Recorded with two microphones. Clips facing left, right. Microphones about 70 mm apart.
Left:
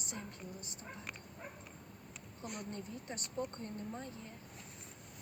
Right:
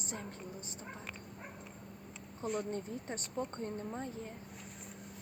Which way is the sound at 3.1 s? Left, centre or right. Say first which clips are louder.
Right 1 dB; right.